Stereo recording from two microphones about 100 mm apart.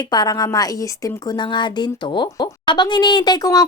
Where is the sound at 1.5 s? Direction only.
50° left (ahead or behind).